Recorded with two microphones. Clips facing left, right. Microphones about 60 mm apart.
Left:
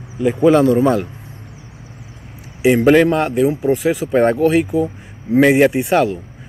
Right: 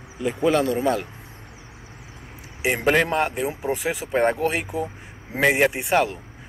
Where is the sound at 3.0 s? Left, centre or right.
Centre.